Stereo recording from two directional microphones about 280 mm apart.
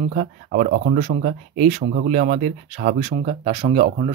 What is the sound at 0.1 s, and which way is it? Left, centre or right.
Speech, right.